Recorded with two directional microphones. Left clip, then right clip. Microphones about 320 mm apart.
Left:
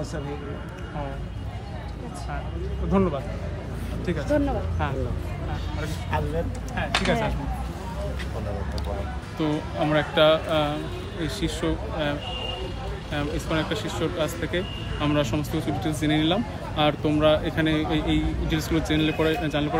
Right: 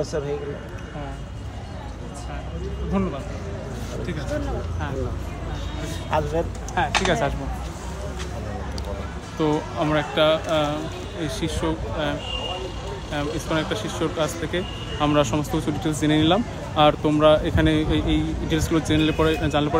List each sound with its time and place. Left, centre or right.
6.1 s speech: centre
9.4 s speech: centre